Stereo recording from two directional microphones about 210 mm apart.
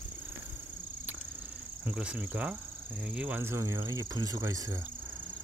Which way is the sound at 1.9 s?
5° right (ahead or behind).